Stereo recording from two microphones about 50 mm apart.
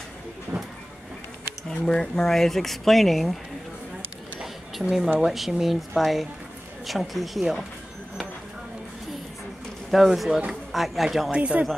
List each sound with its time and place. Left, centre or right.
1.7 s speech: centre
4.4 s a sound: centre
5.2 s speech: centre
9.8 s speech: centre
11.3 s speech: right